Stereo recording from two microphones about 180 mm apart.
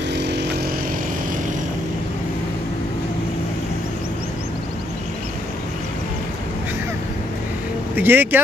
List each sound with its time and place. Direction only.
0.1 s vehicle: 70° right (ahead or behind)
7.9 s speech: 10° right (ahead or behind)